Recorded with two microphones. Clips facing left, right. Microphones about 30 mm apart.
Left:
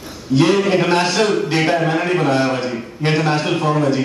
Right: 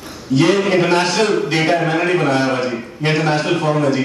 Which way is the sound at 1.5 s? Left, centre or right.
Centre.